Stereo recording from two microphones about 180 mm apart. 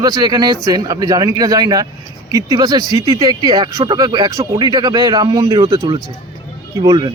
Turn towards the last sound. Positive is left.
turn(degrees=-20)  # may be behind; listen again after turning